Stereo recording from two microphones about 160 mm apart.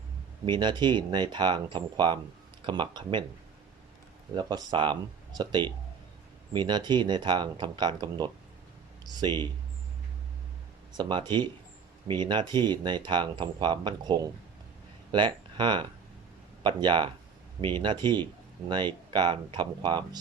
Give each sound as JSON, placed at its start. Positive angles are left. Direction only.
{"t": 0.4, "sound": "speech", "side_deg": -30}
{"t": 4.4, "sound": "speech", "side_deg": -25}
{"t": 10.9, "sound": "speech", "side_deg": -30}